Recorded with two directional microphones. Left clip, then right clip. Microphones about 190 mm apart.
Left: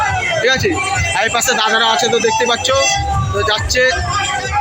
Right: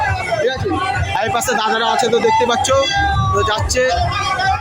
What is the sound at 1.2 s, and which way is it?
Speech, 10° right (ahead or behind).